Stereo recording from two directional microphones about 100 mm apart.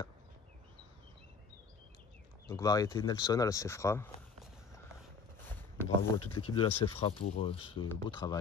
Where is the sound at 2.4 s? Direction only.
35° left (ahead or behind).